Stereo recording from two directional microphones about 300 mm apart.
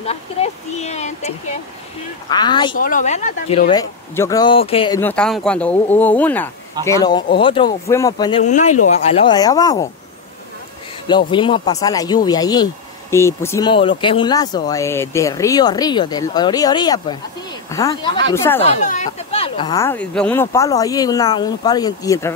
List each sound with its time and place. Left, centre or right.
0.0 s speech: left
2.8 s speech: left
4.1 s speech: centre
11.1 s speech: centre
18.6 s speech: left